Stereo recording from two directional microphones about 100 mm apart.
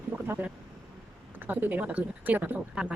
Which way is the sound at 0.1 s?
20° right (ahead or behind).